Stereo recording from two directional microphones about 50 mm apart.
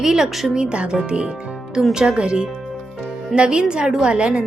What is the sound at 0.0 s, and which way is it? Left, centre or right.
Speech, centre.